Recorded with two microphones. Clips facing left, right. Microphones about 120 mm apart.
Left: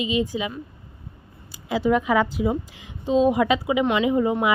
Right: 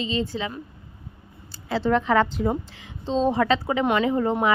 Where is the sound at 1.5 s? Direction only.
10° left (ahead or behind).